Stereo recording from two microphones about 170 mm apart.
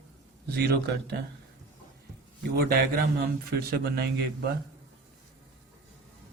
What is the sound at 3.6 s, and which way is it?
Speech, 65° right (ahead or behind).